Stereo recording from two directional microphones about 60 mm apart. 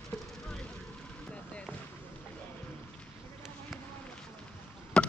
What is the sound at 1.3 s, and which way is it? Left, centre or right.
Basketball bounce, left.